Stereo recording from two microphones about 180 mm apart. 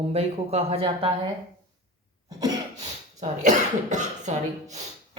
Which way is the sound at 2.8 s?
40° right (ahead or behind).